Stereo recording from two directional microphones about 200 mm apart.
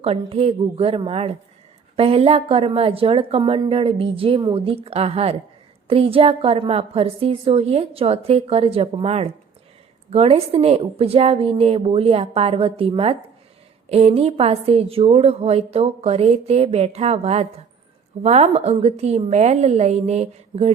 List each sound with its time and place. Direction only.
0.0 s a woman's voice: 30° right (ahead or behind)